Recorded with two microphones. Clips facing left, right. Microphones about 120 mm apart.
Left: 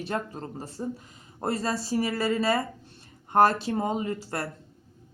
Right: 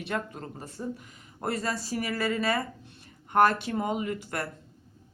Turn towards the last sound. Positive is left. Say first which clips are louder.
# left 1 dB
turn(degrees=30)  # may be behind; listen again after turning